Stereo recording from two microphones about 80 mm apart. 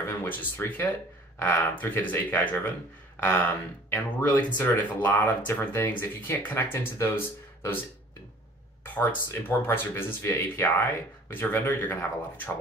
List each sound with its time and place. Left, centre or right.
0.0 s speech: left
3.9 s speech: left
8.8 s speech: left